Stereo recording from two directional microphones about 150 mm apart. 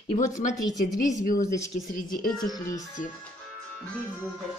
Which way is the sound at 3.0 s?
55° left (ahead or behind).